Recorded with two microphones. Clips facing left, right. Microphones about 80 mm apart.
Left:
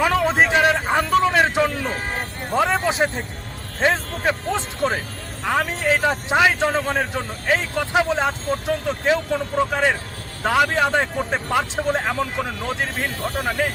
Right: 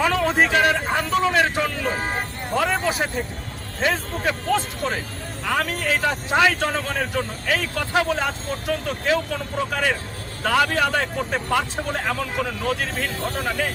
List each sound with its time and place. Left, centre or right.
0.0 s a sound: centre
2.6 s speech: left
4.3 s speech: left